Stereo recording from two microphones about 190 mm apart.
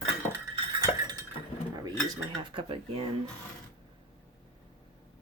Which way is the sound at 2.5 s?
30° right (ahead or behind).